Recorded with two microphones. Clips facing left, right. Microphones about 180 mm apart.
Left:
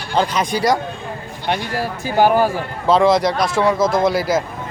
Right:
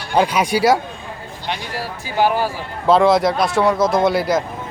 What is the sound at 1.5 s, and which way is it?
Speech, 50° left (ahead or behind).